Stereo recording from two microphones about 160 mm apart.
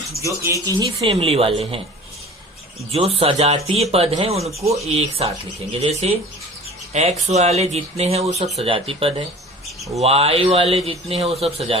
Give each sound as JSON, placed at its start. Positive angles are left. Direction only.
{"t": 0.4, "sound": "a man's voice", "side_deg": -20}
{"t": 2.9, "sound": "a man's voice", "side_deg": -40}